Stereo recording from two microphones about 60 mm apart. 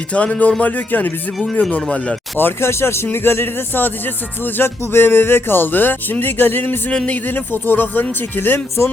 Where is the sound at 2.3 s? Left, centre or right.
Left.